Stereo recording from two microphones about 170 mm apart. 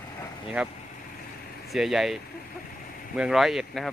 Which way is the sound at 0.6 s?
5° right (ahead or behind).